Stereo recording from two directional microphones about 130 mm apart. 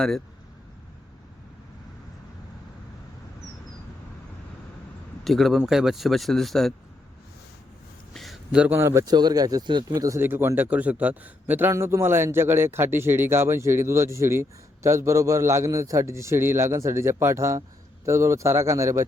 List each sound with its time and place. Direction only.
5.2 s speech: centre (ahead or behind)
8.1 s a man's voice: centre (ahead or behind); by 19.0 s 25° right (ahead or behind)